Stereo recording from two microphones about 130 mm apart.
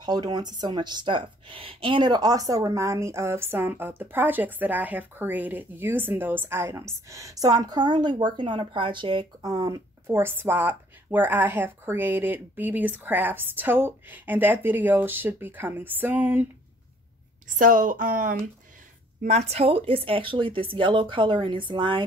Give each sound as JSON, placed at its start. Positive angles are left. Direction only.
{"t": 0.0, "sound": "speech", "side_deg": -30}
{"t": 17.6, "sound": "a woman's voice", "side_deg": -90}
{"t": 19.2, "sound": "speech", "side_deg": -55}